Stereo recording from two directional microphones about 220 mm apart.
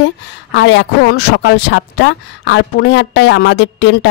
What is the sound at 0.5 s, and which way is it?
A man's voice, 55° left (ahead or behind).